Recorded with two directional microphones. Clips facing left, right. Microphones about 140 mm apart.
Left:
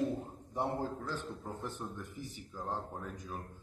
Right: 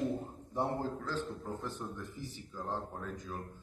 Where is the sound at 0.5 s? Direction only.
20° left (ahead or behind).